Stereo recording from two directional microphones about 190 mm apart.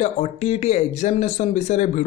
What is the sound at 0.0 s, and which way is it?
Speech, 35° left (ahead or behind).